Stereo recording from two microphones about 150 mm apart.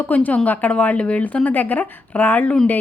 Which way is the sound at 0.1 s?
10° left (ahead or behind).